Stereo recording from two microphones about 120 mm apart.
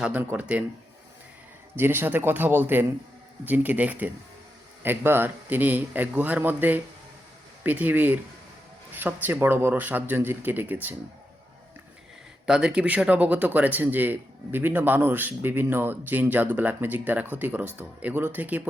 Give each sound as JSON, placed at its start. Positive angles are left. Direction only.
{"t": 0.0, "sound": "speech", "side_deg": -10}
{"t": 1.7, "sound": "speech", "side_deg": -20}
{"t": 12.5, "sound": "speech", "side_deg": -5}